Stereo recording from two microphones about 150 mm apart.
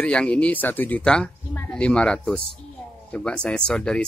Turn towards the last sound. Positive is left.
turn(degrees=5)  # may be behind; listen again after turning